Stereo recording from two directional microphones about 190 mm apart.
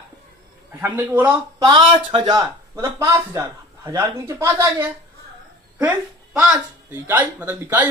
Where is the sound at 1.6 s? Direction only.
25° right (ahead or behind).